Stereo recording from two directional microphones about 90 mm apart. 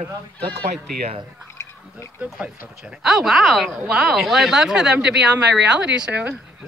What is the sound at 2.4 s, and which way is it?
Speech, 10° right (ahead or behind).